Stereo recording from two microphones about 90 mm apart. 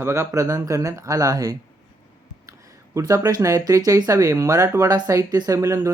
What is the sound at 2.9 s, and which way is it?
Speech, 40° right (ahead or behind).